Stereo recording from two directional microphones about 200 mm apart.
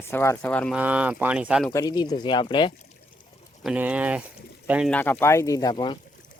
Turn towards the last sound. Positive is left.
turn(degrees=20)  # may be behind; listen again after turning